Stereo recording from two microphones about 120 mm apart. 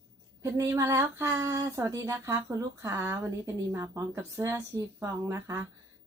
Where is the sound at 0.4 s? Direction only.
25° right (ahead or behind).